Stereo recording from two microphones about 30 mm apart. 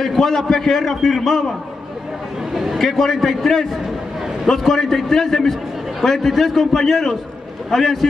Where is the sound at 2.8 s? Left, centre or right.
Centre.